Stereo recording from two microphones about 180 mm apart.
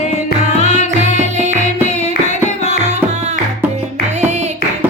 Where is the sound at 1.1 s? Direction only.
40° right (ahead or behind).